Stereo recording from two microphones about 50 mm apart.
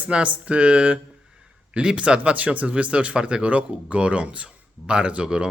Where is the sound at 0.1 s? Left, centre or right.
Right.